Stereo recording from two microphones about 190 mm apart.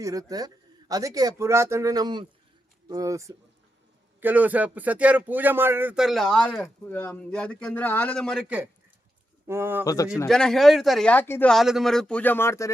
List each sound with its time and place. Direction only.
0.0 s speech: 20° right (ahead or behind); by 8.4 s 5° left (ahead or behind)
8.4 s speech: 10° right (ahead or behind)
9.8 s speech: 20° left (ahead or behind)
10.2 s speech: 5° left (ahead or behind)